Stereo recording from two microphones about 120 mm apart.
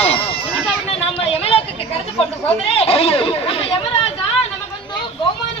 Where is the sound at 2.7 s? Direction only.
55° left (ahead or behind).